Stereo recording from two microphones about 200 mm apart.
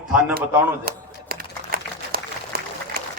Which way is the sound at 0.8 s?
50° right (ahead or behind).